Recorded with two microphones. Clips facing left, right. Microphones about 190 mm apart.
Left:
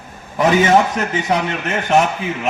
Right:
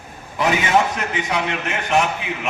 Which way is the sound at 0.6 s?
40° left (ahead or behind).